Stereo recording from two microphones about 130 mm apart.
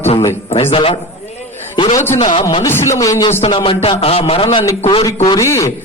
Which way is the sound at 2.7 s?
20° left (ahead or behind).